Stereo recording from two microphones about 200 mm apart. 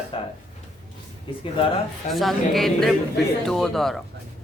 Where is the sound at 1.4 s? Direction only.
25° left (ahead or behind).